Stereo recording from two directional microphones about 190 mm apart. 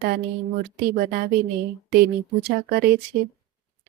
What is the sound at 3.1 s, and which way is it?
Speech, 15° right (ahead or behind).